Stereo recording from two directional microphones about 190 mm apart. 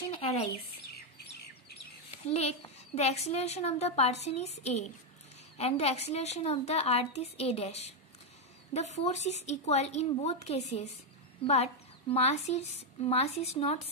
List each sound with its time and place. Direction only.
0.5 s chirp: 55° left (ahead or behind)
2.2 s speech: 35° left (ahead or behind)